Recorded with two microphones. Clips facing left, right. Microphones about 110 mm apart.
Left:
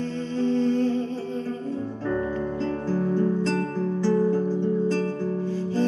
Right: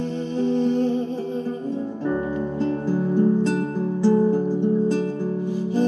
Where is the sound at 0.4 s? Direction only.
15° right (ahead or behind).